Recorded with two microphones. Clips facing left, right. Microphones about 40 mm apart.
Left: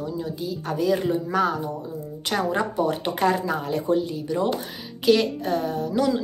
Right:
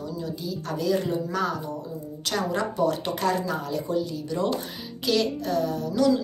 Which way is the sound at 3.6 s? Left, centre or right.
Left.